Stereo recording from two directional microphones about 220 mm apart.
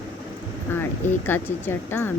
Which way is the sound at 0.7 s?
10° left (ahead or behind).